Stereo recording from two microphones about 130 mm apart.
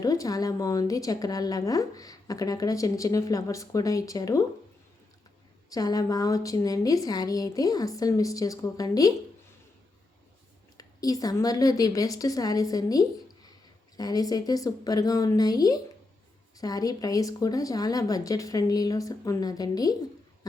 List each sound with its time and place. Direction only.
0.0 s a woman's voice: 25° left (ahead or behind)
5.6 s a woman's voice: 30° left (ahead or behind)
10.8 s a woman's voice: 30° left (ahead or behind)